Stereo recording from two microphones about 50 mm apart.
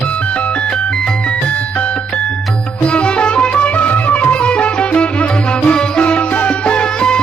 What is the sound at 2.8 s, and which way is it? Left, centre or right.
Music, left.